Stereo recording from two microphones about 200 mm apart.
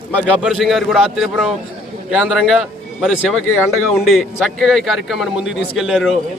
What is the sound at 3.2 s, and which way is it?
Speech, 10° left (ahead or behind).